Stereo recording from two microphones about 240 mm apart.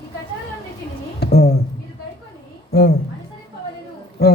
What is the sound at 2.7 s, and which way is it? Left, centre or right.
Speech, left.